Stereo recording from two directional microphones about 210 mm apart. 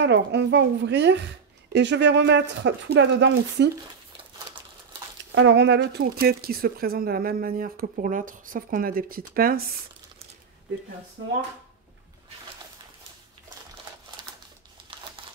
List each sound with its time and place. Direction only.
0.0 s speech: 55° right (ahead or behind)
5.3 s speech: 60° right (ahead or behind)